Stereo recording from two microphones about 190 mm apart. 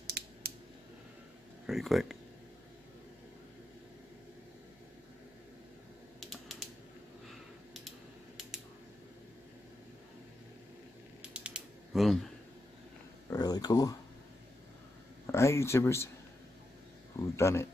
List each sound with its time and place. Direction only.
0.0 s scissors: 55° right (ahead or behind)
1.7 s speech: centre (ahead or behind)
6.1 s typing: centre (ahead or behind)
11.3 s typing: 5° right (ahead or behind)
13.3 s a sound: 20° left (ahead or behind)
15.2 s a sound: 15° left (ahead or behind)
17.4 s speech: 15° left (ahead or behind)